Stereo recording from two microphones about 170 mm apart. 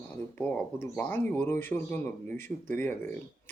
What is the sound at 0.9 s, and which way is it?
A man's voice, 10° left (ahead or behind).